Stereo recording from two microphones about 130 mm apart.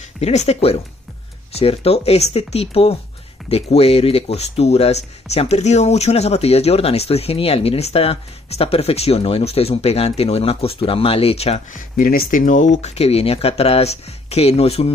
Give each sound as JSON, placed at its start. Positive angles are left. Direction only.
{"t": 0.2, "sound": "speech", "side_deg": 55}
{"t": 12.0, "sound": "speech", "side_deg": 90}